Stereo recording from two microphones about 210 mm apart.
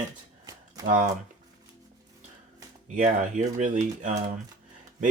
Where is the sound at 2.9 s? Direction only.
35° right (ahead or behind).